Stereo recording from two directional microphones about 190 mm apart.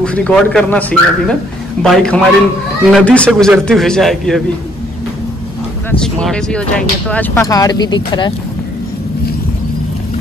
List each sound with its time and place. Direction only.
0.0 s a man's voice: 5° left (ahead or behind)
5.9 s speech: 5° left (ahead or behind); by 8.3 s 25° left (ahead or behind)